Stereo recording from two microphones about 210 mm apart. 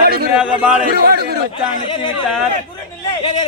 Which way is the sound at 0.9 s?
50° right (ahead or behind).